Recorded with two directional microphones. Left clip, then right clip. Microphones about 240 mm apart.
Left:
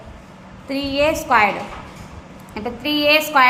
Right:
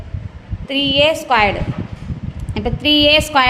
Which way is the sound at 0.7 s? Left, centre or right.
Right.